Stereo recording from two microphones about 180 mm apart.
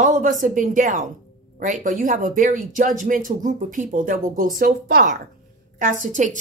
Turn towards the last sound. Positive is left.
turn(degrees=-45)  # may be behind; listen again after turning